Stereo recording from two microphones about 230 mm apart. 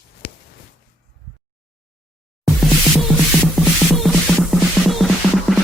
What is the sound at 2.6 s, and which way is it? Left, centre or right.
Music, centre.